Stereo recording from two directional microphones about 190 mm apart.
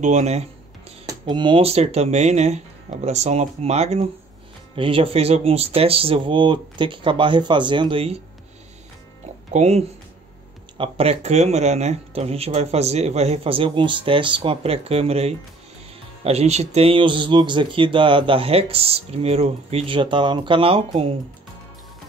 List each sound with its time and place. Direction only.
0.0 s speech: 35° right (ahead or behind)
1.0 s speech: 25° right (ahead or behind)
9.5 s speech: 35° right (ahead or behind)